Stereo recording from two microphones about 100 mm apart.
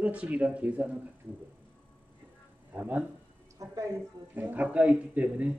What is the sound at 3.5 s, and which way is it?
Speech, 35° right (ahead or behind).